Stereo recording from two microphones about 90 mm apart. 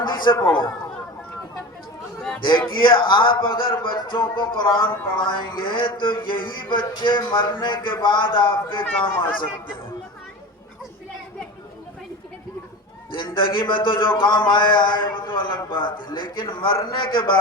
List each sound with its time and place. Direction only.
0.0 s a man's voice: 55° left (ahead or behind)
2.4 s speech: 60° left (ahead or behind)
13.1 s speech: 65° left (ahead or behind)